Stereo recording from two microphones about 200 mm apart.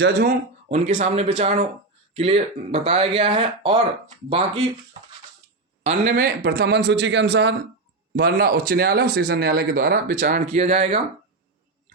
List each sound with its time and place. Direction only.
0.0 s speech: 45° right (ahead or behind)
0.9 s a man's voice: 35° right (ahead or behind)
5.8 s a man's voice: 35° right (ahead or behind)
6.1 s a man's voice: 50° right (ahead or behind); by 11.0 s 35° right (ahead or behind)